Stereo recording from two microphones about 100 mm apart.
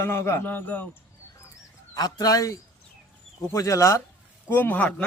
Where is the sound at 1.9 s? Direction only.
40° left (ahead or behind).